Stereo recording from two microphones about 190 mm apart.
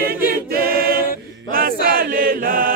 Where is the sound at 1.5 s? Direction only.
50° right (ahead or behind).